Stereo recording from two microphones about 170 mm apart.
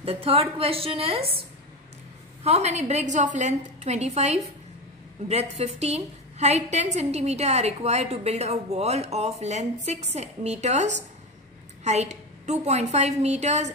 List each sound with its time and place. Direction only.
0.0 s a woman's voice: 35° right (ahead or behind)
2.4 s a woman's voice: 40° right (ahead or behind)